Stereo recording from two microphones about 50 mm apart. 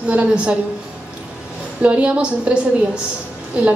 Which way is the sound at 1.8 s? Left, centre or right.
Right.